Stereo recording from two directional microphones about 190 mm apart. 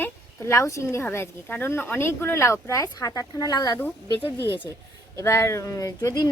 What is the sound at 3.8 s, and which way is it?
A woman's voice, 10° left (ahead or behind).